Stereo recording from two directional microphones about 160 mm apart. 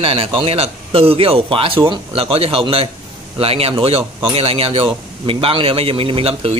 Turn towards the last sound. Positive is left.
turn(degrees=-35)  # may be behind; listen again after turning